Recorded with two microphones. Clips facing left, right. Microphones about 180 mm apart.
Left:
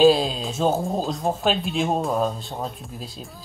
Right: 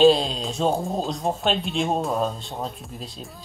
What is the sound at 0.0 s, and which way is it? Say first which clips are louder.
Speech: even; centre (ahead or behind).